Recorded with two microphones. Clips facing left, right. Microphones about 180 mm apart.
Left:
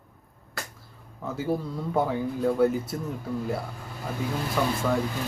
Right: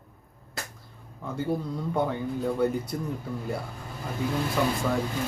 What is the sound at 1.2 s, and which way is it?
Speech, 5° left (ahead or behind).